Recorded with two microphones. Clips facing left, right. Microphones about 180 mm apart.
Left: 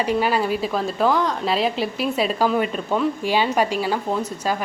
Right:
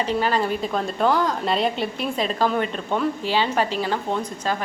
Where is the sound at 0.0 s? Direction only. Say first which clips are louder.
Left 2 dB; 10° left (ahead or behind).